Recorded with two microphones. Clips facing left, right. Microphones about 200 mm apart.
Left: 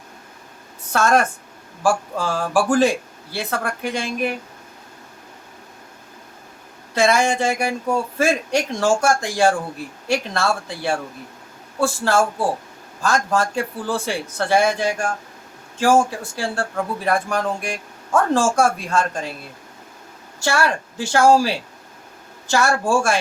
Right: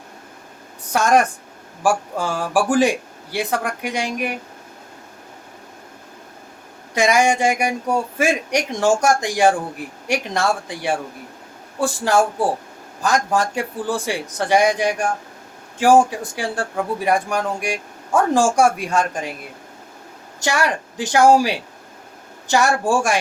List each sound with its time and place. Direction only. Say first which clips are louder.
0.9 s speech: right 1 dB; 15° right (ahead or behind)
6.9 s speech: right 1 dB; 15° right (ahead or behind)
20.4 s speech: even; 15° right (ahead or behind)